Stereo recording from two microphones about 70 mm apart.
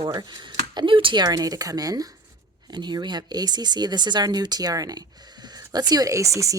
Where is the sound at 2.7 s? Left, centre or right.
Right.